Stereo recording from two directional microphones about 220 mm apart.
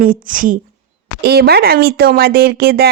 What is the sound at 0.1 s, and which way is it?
A woman's voice, 40° right (ahead or behind).